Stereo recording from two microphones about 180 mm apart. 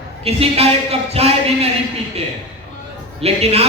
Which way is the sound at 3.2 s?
35° right (ahead or behind).